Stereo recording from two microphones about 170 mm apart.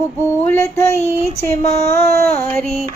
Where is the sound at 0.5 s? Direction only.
15° left (ahead or behind).